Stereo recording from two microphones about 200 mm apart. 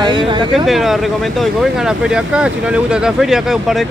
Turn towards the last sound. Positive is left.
turn(degrees=0)  # may be behind; listen again after turning